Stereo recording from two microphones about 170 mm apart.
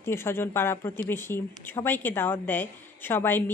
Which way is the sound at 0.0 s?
15° left (ahead or behind).